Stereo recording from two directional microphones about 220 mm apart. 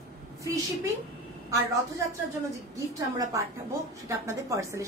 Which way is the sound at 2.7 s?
15° right (ahead or behind).